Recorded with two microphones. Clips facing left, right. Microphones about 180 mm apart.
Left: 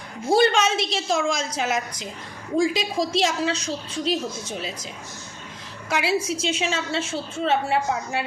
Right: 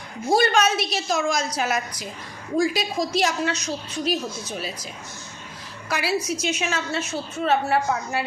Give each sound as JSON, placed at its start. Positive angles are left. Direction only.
{"t": 0.3, "sound": "a woman's voice", "side_deg": 25}
{"t": 5.9, "sound": "a woman's voice", "side_deg": 20}